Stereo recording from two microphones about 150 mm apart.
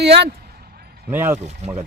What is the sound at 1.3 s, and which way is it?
Speech, 50° right (ahead or behind).